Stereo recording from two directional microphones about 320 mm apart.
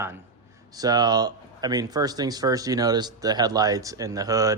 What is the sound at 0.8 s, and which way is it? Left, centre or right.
Speech, centre.